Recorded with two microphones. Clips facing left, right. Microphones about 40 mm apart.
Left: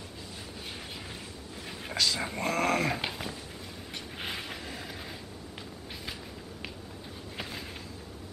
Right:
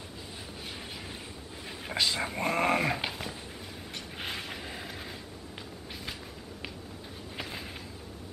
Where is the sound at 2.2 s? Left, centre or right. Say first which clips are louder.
Right 1 dB; centre.